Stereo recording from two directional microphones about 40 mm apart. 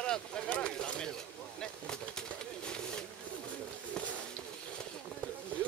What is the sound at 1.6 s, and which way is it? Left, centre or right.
Bird, centre.